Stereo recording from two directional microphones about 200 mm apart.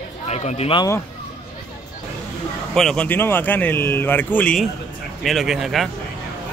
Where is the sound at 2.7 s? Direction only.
5° left (ahead or behind).